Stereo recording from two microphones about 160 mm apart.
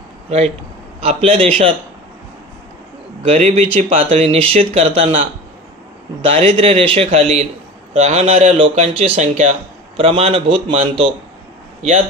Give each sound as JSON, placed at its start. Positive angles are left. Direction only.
{"t": 0.3, "sound": "speech", "side_deg": -40}
{"t": 3.3, "sound": "speech", "side_deg": -45}
{"t": 6.2, "sound": "speech", "side_deg": -35}
{"t": 11.8, "sound": "speech", "side_deg": -45}